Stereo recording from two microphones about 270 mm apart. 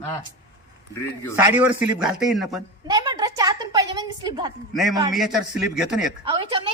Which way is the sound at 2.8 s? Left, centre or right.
Centre.